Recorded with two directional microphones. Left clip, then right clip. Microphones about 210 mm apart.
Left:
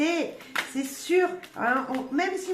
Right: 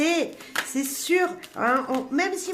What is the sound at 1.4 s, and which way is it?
Speech, 40° right (ahead or behind).